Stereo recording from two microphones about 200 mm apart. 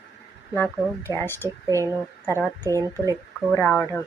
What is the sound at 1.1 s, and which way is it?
Speech, 10° left (ahead or behind).